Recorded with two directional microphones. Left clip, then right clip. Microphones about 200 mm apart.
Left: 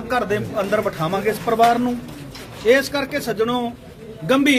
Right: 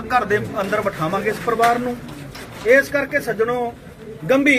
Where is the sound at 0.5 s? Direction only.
55° left (ahead or behind).